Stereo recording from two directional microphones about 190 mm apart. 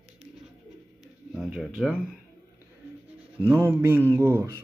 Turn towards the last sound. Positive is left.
turn(degrees=-15)  # may be behind; listen again after turning